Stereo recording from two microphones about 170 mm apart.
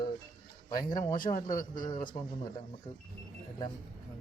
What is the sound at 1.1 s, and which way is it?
Speech, 55° left (ahead or behind).